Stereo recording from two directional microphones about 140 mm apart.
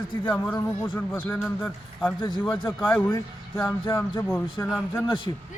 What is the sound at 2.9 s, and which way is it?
Speech, 15° left (ahead or behind).